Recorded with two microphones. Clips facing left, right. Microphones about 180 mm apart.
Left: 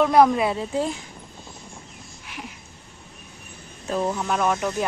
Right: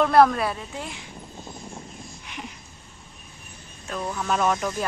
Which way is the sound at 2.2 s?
5° left (ahead or behind).